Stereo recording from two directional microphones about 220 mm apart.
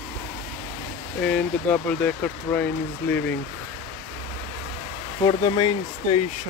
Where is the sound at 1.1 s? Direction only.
5° left (ahead or behind).